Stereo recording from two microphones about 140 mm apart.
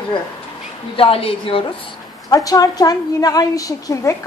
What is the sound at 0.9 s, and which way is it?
A woman's voice, 40° left (ahead or behind).